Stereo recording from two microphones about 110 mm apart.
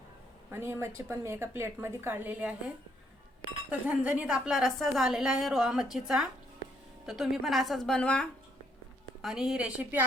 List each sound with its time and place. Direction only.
0.5 s a woman's voice: 25° right (ahead or behind)
3.7 s a woman's voice: 10° right (ahead or behind); by 8.3 s 10° left (ahead or behind)
9.2 s a woman's voice: 5° right (ahead or behind)